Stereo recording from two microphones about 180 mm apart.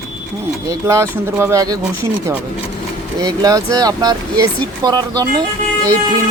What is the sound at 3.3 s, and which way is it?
Speech, 20° right (ahead or behind).